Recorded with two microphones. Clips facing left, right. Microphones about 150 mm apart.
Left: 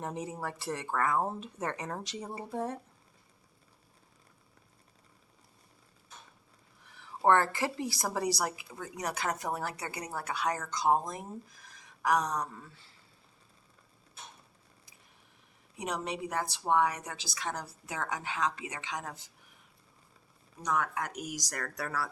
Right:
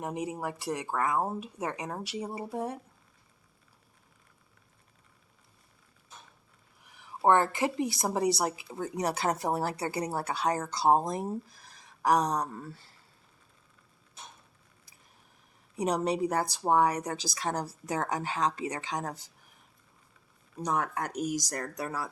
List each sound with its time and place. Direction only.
0.0 s speech: 15° right (ahead or behind)
6.8 s a sound: 15° right (ahead or behind)
7.2 s a woman's voice: 20° right (ahead or behind); by 13.0 s 40° right (ahead or behind)
15.7 s a woman's voice: 35° right (ahead or behind)
20.7 s speech: 35° right (ahead or behind); by 22.1 s 20° right (ahead or behind)